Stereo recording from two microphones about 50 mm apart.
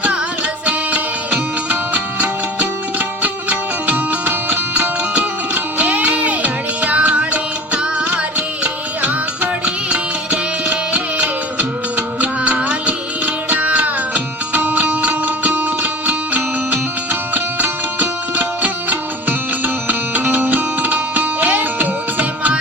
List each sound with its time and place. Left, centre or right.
0.6 s music: right